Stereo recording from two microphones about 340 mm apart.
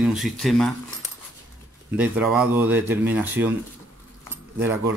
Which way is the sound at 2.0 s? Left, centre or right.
Centre.